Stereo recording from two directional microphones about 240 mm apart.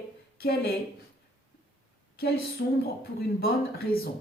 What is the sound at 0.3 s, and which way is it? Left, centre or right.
Speech, left.